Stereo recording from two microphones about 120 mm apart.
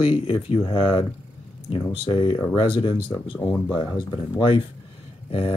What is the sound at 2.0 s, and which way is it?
Speech, 45° left (ahead or behind).